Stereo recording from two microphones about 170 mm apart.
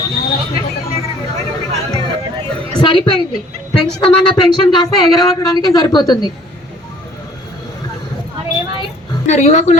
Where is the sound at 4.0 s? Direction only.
30° left (ahead or behind).